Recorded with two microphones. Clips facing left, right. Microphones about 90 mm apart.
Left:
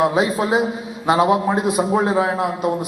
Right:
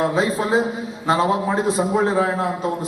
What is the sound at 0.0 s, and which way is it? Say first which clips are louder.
A man's voice: left 2 dB; 10° left (ahead or behind).